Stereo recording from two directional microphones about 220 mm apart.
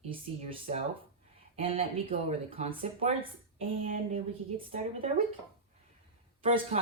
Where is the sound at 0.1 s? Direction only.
25° right (ahead or behind).